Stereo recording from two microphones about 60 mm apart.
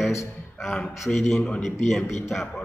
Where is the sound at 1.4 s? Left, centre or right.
Centre.